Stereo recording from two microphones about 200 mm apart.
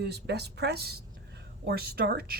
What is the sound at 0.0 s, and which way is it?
Speech, 55° right (ahead or behind).